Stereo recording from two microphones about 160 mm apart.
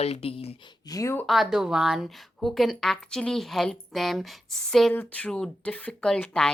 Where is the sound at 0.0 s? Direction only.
40° left (ahead or behind).